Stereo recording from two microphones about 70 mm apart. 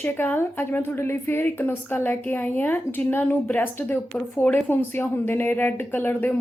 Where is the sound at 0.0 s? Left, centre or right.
Left.